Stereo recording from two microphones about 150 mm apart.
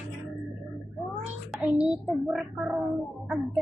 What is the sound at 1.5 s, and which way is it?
A child's voice, 10° right (ahead or behind).